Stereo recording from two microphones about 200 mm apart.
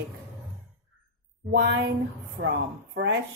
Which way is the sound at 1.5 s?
60° right (ahead or behind).